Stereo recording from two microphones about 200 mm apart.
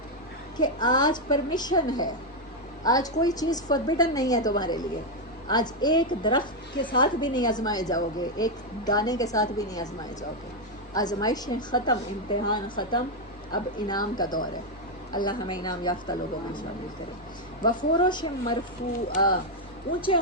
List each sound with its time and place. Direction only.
0.5 s a woman's voice: 20° left (ahead or behind)
10.9 s a woman's voice: 20° left (ahead or behind)